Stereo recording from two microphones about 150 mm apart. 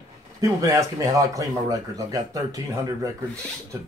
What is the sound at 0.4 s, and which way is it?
A man's voice, 25° right (ahead or behind).